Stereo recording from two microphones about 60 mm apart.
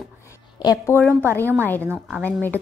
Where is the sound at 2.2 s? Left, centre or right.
Left.